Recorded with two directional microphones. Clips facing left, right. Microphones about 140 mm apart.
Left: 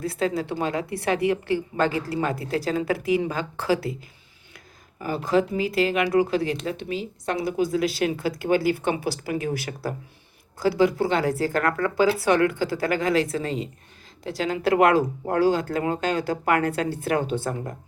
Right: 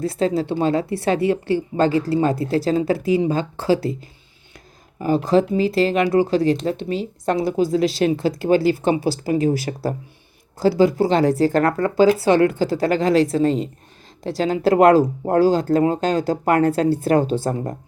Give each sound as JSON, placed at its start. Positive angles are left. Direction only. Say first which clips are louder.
{"t": 0.0, "sound": "speech", "louder": "right 5 dB", "side_deg": -30}